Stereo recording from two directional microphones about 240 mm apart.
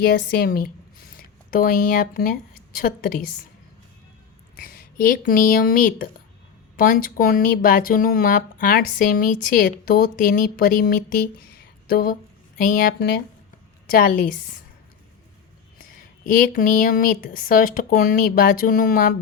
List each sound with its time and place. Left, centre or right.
0.1 s speech: left
4.6 s speech: left
15.8 s speech: left